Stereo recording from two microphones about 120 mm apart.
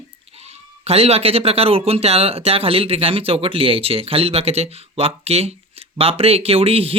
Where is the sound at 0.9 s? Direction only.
55° right (ahead or behind).